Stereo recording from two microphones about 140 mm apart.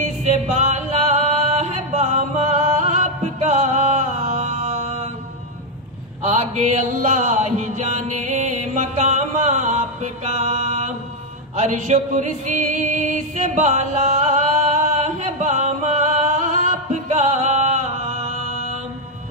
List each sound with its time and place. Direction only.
0.0 s music: 55° right (ahead or behind)
6.2 s mantra: 55° right (ahead or behind)
11.5 s music: 60° right (ahead or behind)